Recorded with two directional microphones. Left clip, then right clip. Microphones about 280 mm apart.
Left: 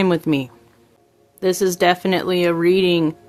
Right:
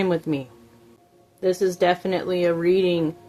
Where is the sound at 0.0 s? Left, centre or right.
Left.